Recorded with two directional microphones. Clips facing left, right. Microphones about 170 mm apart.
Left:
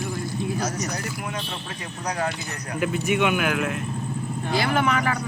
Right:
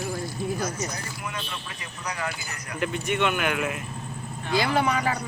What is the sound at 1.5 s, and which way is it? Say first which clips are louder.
Speech: left 4 dB; 40° left (ahead or behind).